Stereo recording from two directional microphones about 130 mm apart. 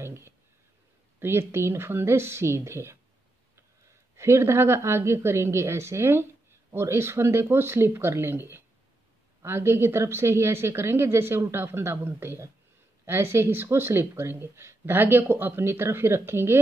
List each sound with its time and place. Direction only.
0.0 s a sound: 20° right (ahead or behind)
1.2 s a woman's voice: 20° right (ahead or behind)
4.2 s a woman's voice: 20° right (ahead or behind)